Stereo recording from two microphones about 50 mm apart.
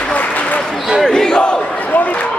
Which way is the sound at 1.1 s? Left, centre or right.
Centre.